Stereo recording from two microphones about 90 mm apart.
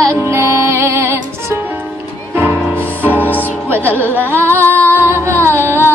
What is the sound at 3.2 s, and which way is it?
Music, 20° left (ahead or behind).